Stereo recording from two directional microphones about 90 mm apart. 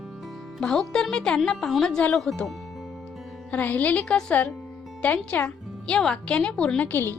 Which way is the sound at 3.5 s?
15° left (ahead or behind).